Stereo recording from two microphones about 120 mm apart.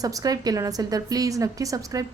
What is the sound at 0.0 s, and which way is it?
A woman's voice, 30° right (ahead or behind).